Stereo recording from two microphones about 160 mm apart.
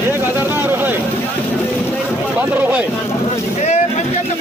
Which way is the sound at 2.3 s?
10° right (ahead or behind).